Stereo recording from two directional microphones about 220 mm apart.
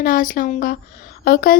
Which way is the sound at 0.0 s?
40° left (ahead or behind).